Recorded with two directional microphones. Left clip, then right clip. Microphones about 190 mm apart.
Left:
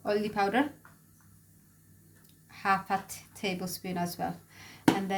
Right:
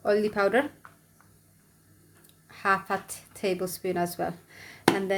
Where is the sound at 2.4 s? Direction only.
35° right (ahead or behind).